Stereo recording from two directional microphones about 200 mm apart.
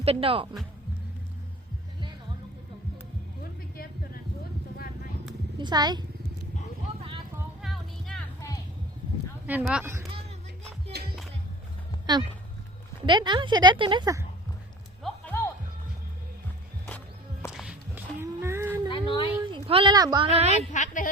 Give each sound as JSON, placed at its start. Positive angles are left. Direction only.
{"t": 0.0, "sound": "a woman's voice", "side_deg": -30}
{"t": 5.5, "sound": "a woman's voice", "side_deg": -20}
{"t": 7.6, "sound": "music", "side_deg": 0}
{"t": 9.5, "sound": "speech", "side_deg": -5}
{"t": 10.9, "sound": "music", "side_deg": -55}
{"t": 12.1, "sound": "a woman's voice", "side_deg": -20}
{"t": 15.0, "sound": "music", "side_deg": 10}
{"t": 17.5, "sound": "a sound", "side_deg": -5}
{"t": 18.9, "sound": "a sound", "side_deg": 25}
{"t": 19.5, "sound": "speech", "side_deg": -25}
{"t": 20.6, "sound": "a woman's voice", "side_deg": 40}